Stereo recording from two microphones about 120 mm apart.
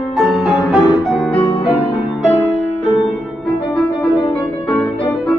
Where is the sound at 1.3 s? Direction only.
55° left (ahead or behind).